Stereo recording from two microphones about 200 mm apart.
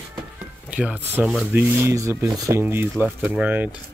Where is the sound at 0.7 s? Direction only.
5° right (ahead or behind).